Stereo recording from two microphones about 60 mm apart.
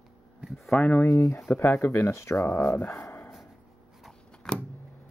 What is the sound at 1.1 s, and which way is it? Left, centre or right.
Speech, left.